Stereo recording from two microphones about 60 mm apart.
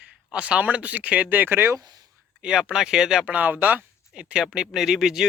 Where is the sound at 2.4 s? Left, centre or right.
Centre.